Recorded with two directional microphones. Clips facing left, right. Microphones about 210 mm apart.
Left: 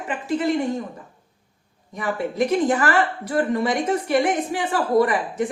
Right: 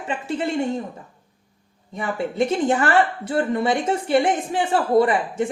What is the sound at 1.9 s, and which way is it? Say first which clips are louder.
A woman's voice: even; 30° right (ahead or behind).